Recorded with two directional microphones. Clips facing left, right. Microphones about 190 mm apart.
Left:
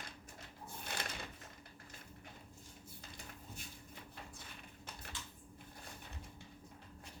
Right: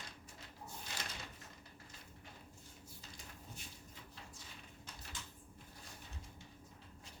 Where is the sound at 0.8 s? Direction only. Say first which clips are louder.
Left 5 dB; 60° left (ahead or behind).